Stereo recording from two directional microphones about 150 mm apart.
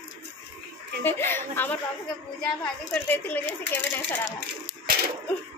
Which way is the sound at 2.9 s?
15° left (ahead or behind).